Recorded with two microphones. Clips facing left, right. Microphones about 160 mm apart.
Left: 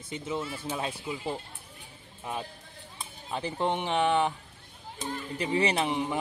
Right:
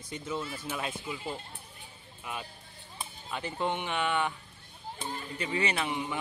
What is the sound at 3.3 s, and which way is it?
Speech, 30° left (ahead or behind).